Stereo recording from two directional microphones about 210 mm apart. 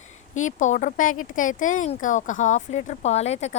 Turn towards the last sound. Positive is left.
turn(degrees=30)  # may be behind; listen again after turning